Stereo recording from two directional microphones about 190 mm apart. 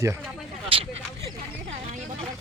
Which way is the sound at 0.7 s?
30° right (ahead or behind).